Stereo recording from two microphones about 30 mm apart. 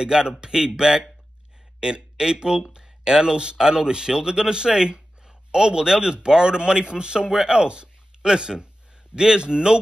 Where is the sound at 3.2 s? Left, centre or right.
Right.